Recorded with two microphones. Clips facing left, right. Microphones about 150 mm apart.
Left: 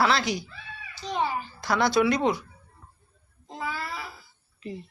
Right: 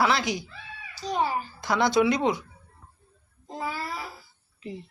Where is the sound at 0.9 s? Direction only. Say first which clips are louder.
Right 2 dB; 40° right (ahead or behind).